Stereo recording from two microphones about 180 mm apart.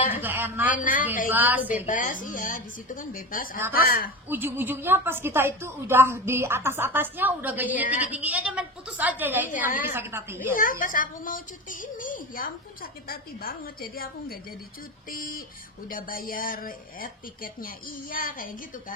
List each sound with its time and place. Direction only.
0.2 s a sound: 10° right (ahead or behind)
0.7 s a man's voice: 50° left (ahead or behind)
1.3 s a woman's voice: 10° right (ahead or behind)
1.9 s a woman's voice: 45° left (ahead or behind)
4.3 s a woman's voice: 10° right (ahead or behind)
10.5 s a woman's voice: 50° left (ahead or behind)